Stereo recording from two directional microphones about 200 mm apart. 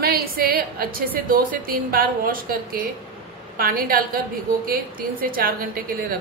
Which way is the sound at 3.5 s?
45° right (ahead or behind).